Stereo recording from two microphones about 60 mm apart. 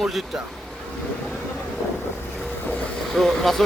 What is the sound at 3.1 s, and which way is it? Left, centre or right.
Speech, centre.